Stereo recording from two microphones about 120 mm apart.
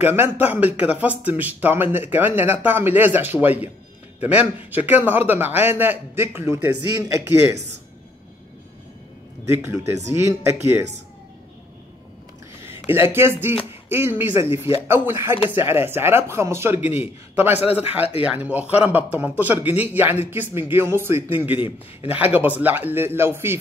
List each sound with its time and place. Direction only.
0.0 s a man's voice: 20° right (ahead or behind)
10.0 s a man's voice: 20° right (ahead or behind)
12.6 s a man's voice: 20° right (ahead or behind)